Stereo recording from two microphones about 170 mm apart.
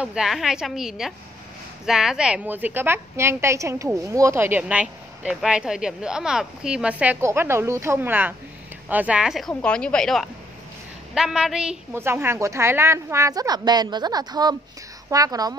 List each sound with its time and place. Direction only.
0.0 s a woman's voice: 5° right (ahead or behind)
11.9 s a woman's voice: 15° right (ahead or behind)